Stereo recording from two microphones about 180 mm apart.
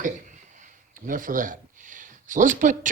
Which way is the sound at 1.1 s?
50° right (ahead or behind).